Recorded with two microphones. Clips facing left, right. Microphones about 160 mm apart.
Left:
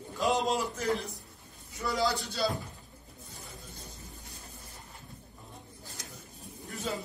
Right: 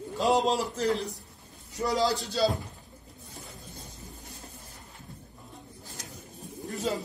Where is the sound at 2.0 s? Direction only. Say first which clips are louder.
Right 3 dB; 40° right (ahead or behind).